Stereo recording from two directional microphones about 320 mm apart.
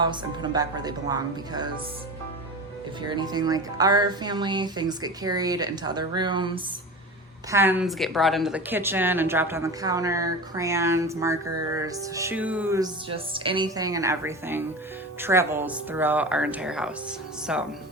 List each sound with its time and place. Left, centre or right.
0.0 s music: centre
3.1 s music: centre
15.2 s speech: centre